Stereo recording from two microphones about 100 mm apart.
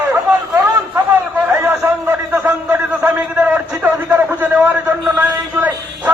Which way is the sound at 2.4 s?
15° right (ahead or behind).